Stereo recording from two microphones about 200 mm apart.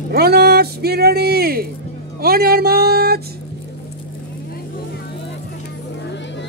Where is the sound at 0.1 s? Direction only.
50° right (ahead or behind).